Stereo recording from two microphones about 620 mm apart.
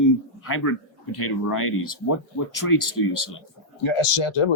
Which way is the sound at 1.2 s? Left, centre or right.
Left.